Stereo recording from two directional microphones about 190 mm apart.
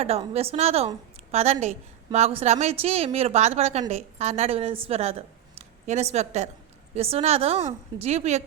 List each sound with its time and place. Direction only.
0.0 s a woman's voice: 35° right (ahead or behind)